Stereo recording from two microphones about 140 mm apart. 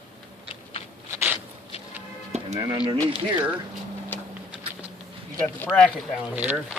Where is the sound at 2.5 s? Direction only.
30° right (ahead or behind).